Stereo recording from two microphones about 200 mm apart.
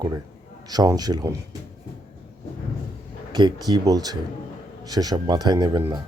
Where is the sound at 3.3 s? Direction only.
20° right (ahead or behind).